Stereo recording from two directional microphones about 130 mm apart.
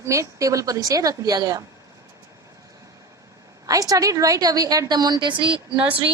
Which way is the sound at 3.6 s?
25° right (ahead or behind).